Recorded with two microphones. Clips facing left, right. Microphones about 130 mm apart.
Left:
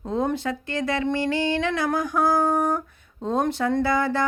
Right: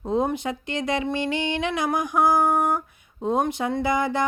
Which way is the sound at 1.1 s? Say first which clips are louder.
Left 2 dB; 20° right (ahead or behind).